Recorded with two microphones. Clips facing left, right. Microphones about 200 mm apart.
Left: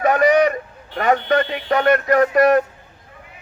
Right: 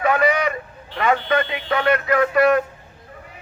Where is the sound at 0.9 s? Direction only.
45° left (ahead or behind).